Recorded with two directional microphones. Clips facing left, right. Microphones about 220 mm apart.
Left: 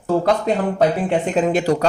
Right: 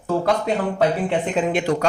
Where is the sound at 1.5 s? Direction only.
40° left (ahead or behind).